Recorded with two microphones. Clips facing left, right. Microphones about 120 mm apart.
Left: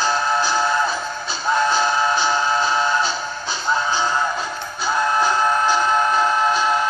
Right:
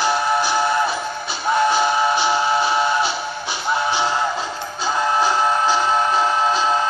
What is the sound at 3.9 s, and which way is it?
Music, 75° right (ahead or behind).